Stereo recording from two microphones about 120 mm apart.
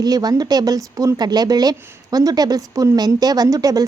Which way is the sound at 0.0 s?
35° right (ahead or behind).